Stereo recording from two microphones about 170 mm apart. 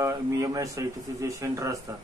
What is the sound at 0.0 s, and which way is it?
Speech, 20° right (ahead or behind).